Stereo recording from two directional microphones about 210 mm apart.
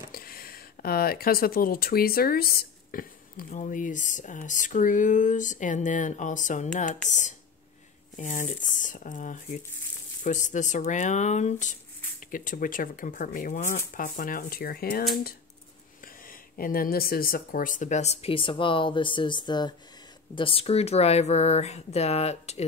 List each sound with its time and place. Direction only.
0.1 s speech: 45° left (ahead or behind)